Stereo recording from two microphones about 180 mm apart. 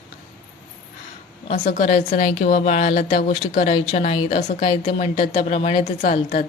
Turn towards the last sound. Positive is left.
turn(degrees=45)  # may be behind; listen again after turning